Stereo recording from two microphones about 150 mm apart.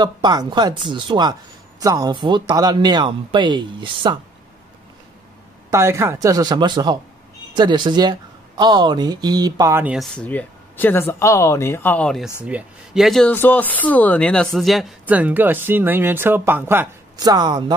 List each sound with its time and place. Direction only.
0.0 s speech: 30° right (ahead or behind)
5.7 s speech: 20° right (ahead or behind)
9.8 s speech: centre (ahead or behind)
12.4 s speech: 5° right (ahead or behind)
15.0 s speech: 10° right (ahead or behind)
17.2 s speech: 25° right (ahead or behind)